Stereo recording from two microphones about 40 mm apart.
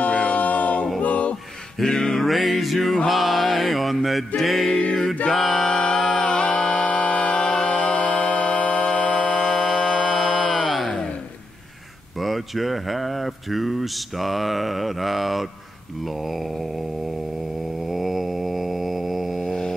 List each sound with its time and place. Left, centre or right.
0.0 s a capella: left
1.0 s a sound: left
1.8 s music: centre
2.2 s music: centre
3.1 s mantra: centre
4.4 s music: centre
5.3 s a sound: centre
6.2 s music: centre
6.9 s music: left
9.2 s music: centre
12.2 s speech: centre
16.0 s mantra: centre
17.7 s a sound: centre